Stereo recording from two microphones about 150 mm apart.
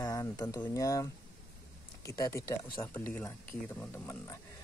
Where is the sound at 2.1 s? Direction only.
20° left (ahead or behind).